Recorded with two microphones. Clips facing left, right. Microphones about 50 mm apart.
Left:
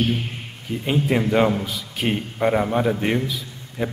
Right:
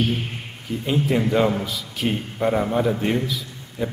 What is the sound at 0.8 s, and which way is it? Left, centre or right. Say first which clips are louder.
Speech: even; left.